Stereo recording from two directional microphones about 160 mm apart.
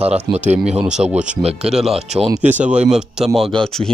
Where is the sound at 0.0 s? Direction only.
40° right (ahead or behind).